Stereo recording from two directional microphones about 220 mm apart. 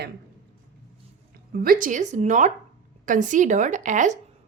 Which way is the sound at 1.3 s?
40° right (ahead or behind).